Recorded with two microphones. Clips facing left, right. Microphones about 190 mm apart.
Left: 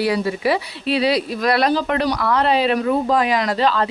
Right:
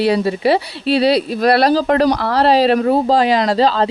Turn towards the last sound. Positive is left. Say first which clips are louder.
# right 4 dB
turn(degrees=-30)  # may be behind; listen again after turning